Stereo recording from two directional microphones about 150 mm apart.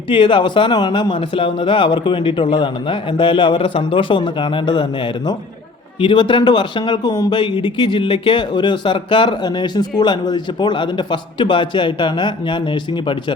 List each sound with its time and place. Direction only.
0.1 s speech: 35° left (ahead or behind)